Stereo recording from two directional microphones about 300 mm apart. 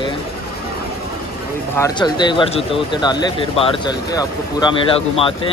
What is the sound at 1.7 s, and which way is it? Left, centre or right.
Speech, centre.